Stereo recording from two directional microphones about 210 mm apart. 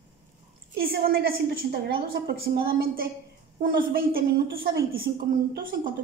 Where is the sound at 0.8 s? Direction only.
45° right (ahead or behind).